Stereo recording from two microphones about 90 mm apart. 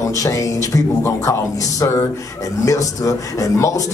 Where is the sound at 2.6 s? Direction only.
40° left (ahead or behind).